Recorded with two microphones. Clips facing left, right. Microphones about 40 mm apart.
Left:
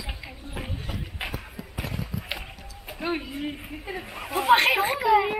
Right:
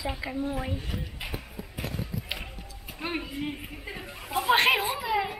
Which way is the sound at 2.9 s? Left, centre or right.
Left.